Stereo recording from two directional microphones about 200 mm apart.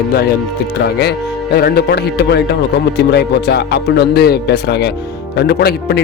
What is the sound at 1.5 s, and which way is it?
Speech, 50° left (ahead or behind).